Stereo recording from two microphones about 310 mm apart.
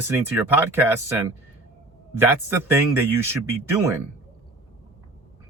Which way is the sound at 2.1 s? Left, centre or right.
Centre.